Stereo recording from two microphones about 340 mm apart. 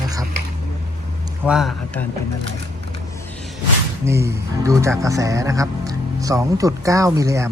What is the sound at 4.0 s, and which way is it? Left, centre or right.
Speech, centre.